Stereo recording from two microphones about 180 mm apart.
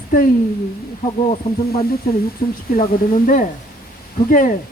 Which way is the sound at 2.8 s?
45° left (ahead or behind).